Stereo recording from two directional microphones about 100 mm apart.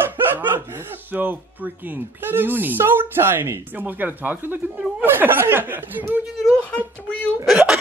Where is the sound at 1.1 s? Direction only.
15° right (ahead or behind).